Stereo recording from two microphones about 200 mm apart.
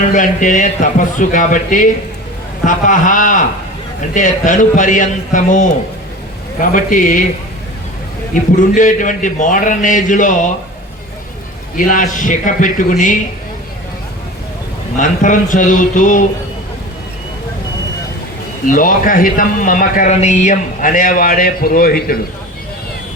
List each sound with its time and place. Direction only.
0.1 s a man's voice: 40° left (ahead or behind)
8.3 s a man's voice: 40° left (ahead or behind)
11.8 s a man's voice: 40° left (ahead or behind)
14.9 s a man's voice: 40° left (ahead or behind)
18.7 s speech: 40° left (ahead or behind)